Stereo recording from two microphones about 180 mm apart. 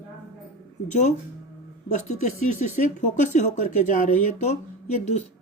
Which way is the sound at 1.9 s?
40° left (ahead or behind).